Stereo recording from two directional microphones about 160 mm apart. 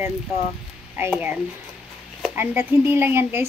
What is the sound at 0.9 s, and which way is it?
Speech, 15° right (ahead or behind).